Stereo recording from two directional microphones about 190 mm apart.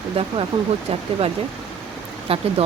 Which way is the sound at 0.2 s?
30° right (ahead or behind).